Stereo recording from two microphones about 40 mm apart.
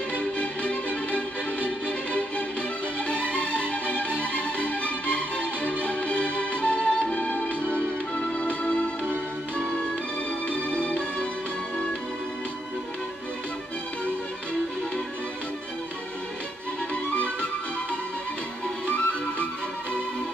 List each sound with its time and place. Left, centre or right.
0.2 s music: left
7.2 s music: left
10.5 s music: left
17.1 s music: left
18.9 s music: left